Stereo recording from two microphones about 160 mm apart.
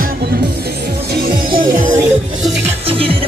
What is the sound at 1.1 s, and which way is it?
Music, 70° right (ahead or behind).